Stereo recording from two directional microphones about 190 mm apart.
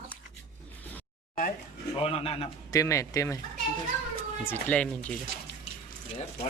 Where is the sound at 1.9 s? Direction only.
30° left (ahead or behind).